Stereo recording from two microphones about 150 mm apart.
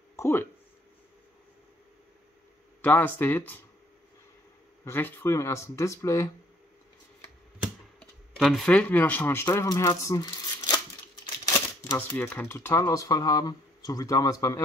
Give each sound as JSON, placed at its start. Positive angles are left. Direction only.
{"t": 0.1, "sound": "speech", "side_deg": 20}
{"t": 2.8, "sound": "speech", "side_deg": 10}
{"t": 4.8, "sound": "speech", "side_deg": 15}
{"t": 8.0, "sound": "speech", "side_deg": 5}
{"t": 11.4, "sound": "typewriter", "side_deg": 25}
{"t": 12.2, "sound": "speech", "side_deg": 15}